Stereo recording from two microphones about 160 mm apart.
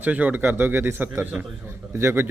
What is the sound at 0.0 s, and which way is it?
A man's voice, 10° right (ahead or behind).